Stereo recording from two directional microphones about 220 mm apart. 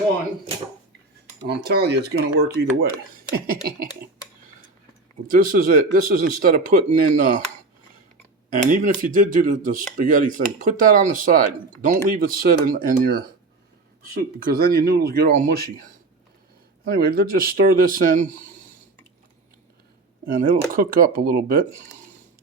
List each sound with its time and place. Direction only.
1.5 s speech: 45° right (ahead or behind)
5.3 s speech: 40° right (ahead or behind)
8.7 s speech: 35° right (ahead or behind)
16.8 s speech: 40° right (ahead or behind)
20.3 s speech: 40° right (ahead or behind)